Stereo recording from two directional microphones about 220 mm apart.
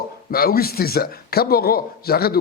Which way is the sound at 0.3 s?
45° left (ahead or behind).